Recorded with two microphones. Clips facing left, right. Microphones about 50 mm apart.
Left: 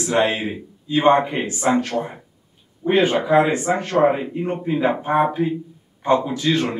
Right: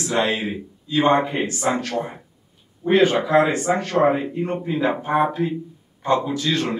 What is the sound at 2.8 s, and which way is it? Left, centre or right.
Speech, left.